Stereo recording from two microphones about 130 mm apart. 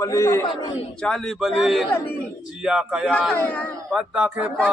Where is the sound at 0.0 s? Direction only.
20° left (ahead or behind).